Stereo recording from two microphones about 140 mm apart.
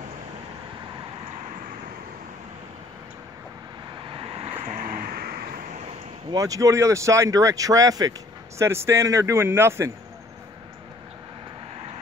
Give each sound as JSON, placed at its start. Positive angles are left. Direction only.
{"t": 4.1, "sound": "vehicle", "side_deg": -40}
{"t": 4.6, "sound": "vehicle", "side_deg": -85}
{"t": 6.3, "sound": "speech", "side_deg": -25}